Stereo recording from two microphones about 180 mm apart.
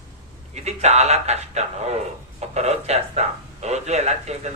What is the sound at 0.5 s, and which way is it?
Speech, 40° right (ahead or behind).